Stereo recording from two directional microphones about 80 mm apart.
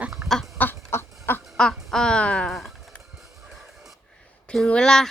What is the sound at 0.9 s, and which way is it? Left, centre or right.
Duck, left.